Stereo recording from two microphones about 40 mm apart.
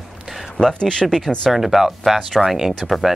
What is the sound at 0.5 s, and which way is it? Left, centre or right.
Speech, centre.